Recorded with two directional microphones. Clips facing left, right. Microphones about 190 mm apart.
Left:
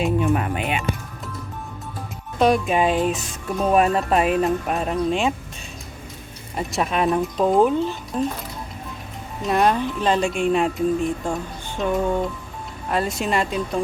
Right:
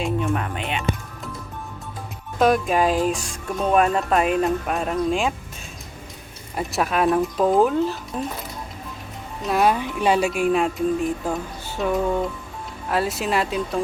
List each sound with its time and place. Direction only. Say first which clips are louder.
0.0 s speech: left 3 dB; 5° left (ahead or behind)
2.4 s speech: even; centre (ahead or behind)
6.6 s speech: right 1 dB; centre (ahead or behind)
9.5 s speech: left 1 dB; 5° right (ahead or behind)